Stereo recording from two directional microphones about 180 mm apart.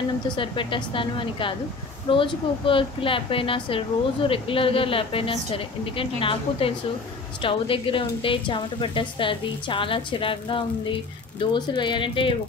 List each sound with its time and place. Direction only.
0.4 s a woman's voice: 30° left (ahead or behind)